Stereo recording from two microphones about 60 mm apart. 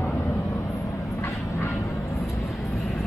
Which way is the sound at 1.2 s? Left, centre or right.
Left.